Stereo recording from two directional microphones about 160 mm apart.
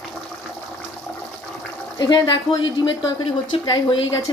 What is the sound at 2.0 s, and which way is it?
A woman's voice, 25° left (ahead or behind).